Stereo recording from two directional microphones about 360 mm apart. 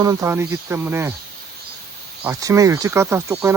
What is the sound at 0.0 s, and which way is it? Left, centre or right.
Speech, centre.